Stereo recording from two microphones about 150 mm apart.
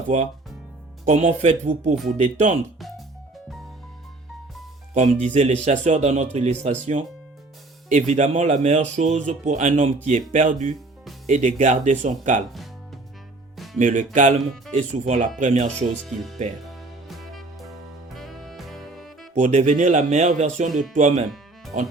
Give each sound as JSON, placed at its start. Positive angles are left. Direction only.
{"t": 0.1, "sound": "speech", "side_deg": -50}
{"t": 5.2, "sound": "speech", "side_deg": -50}
{"t": 7.9, "sound": "speech", "side_deg": -50}
{"t": 13.7, "sound": "speech", "side_deg": -55}
{"t": 16.0, "sound": "speech", "side_deg": 0}
{"t": 16.6, "sound": "music", "side_deg": 0}
{"t": 19.3, "sound": "speech", "side_deg": -50}